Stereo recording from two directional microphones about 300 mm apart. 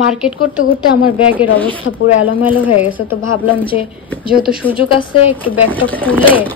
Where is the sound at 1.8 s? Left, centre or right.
Left.